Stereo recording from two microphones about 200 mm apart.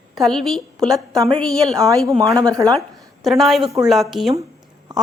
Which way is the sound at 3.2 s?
Centre (ahead or behind).